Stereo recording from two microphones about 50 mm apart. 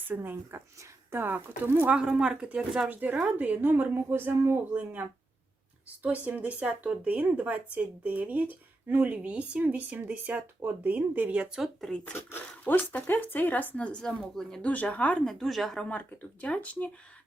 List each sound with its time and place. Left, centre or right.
0.1 s speech: right
1.9 s speech: centre
2.9 s speech: right
4.7 s speech: right
11.9 s speech: centre
12.7 s speech: left
13.7 s speech: left
14.6 s speech: left
15.2 s speech: centre
15.9 s speech: left